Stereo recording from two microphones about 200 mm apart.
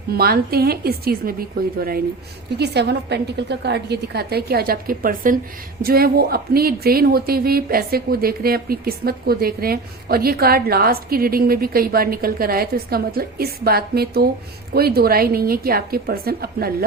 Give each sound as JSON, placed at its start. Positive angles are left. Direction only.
{"t": 0.1, "sound": "speech", "side_deg": -50}